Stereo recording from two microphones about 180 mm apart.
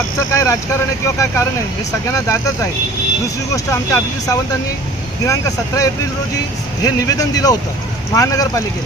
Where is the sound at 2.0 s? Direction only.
15° left (ahead or behind).